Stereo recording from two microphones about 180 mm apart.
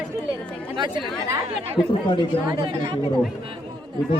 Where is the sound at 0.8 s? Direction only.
25° right (ahead or behind).